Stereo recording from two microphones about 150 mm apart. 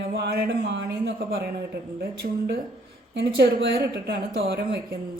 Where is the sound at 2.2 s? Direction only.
80° right.